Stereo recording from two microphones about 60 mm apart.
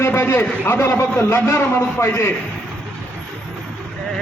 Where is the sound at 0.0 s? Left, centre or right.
Left.